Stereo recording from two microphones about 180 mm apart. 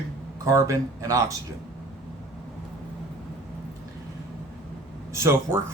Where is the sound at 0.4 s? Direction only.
15° right (ahead or behind).